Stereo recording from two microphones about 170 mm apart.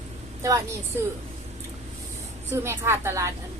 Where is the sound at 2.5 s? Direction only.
15° right (ahead or behind).